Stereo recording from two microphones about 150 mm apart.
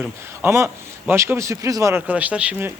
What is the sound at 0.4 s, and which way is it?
A man's voice, 15° right (ahead or behind).